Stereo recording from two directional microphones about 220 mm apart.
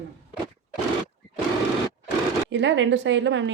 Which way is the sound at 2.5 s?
55° right (ahead or behind).